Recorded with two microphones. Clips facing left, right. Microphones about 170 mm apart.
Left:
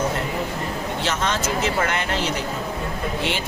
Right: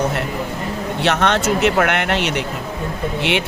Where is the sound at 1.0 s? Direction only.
70° right (ahead or behind).